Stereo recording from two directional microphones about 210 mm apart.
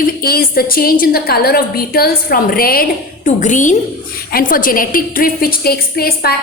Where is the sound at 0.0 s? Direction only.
45° left (ahead or behind).